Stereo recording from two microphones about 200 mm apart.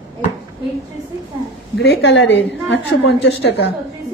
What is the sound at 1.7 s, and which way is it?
A woman's voice, 60° left (ahead or behind).